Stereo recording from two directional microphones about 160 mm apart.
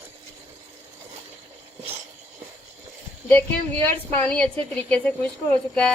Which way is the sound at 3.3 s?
10° left (ahead or behind).